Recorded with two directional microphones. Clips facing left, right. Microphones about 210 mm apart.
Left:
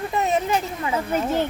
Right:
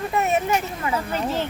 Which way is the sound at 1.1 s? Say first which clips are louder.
Left 6 dB; 15° left (ahead or behind).